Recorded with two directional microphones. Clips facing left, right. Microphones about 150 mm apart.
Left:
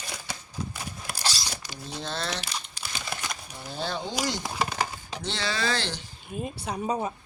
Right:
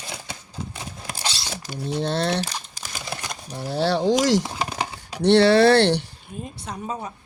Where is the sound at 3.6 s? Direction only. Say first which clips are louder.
Right 11 dB; 75° right (ahead or behind); by 4.4 s 90° right.